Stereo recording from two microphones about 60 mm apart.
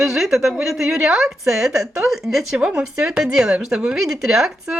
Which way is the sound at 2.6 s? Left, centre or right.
Centre.